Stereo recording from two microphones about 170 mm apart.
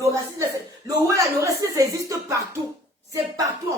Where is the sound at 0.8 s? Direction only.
20° right (ahead or behind).